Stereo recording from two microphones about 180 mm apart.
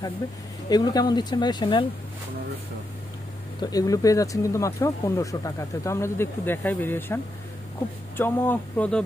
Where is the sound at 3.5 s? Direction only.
20° left (ahead or behind).